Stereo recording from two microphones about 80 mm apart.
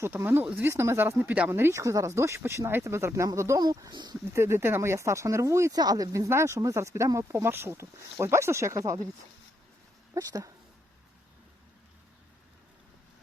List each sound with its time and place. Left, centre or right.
0.0 s speech: right
1.2 s speech: centre
1.5 s speech: right
1.8 s speech: right
3.6 s speech: right
4.3 s speech: right
5.7 s speech: right
10.2 s speech: right